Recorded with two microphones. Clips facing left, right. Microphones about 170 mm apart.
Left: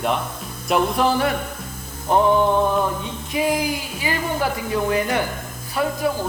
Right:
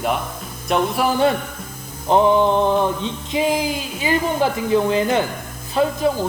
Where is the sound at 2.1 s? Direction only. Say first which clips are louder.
Right 2 dB; 20° right (ahead or behind).